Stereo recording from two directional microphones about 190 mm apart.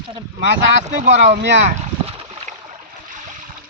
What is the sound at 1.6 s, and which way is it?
Boat, 35° right (ahead or behind).